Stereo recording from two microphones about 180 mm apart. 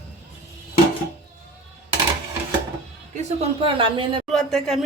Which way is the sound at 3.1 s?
30° right (ahead or behind).